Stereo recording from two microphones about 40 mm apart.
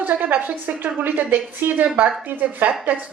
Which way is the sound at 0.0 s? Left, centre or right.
Right.